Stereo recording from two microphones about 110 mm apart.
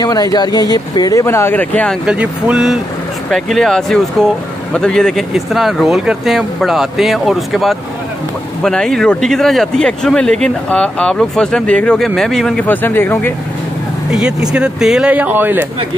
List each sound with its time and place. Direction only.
0.0 s speech: 35° left (ahead or behind)
1.2 s speech: 20° left (ahead or behind)
2.0 s speech: 10° right (ahead or behind)
12.6 s speech: 20° left (ahead or behind)
14.5 s speech: 5° right (ahead or behind)